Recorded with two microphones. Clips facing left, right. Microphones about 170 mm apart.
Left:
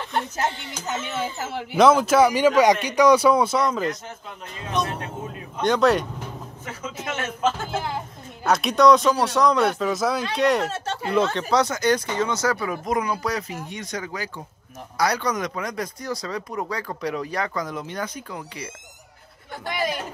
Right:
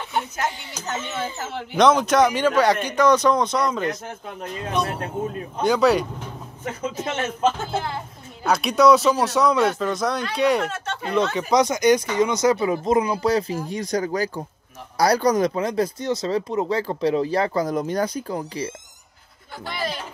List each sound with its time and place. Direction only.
0.1 s a sound: 5° right (ahead or behind)
1.0 s speech: 10° left (ahead or behind)
5.6 s speech: centre (ahead or behind)
6.6 s speech: 30° right (ahead or behind)
7.6 s speech: 10° left (ahead or behind)
8.5 s speech: centre (ahead or behind)
10.7 s speech: 35° left (ahead or behind)
11.3 s speech: 15° right (ahead or behind); by 18.7 s 30° right (ahead or behind)
19.6 s speech: 15° left (ahead or behind)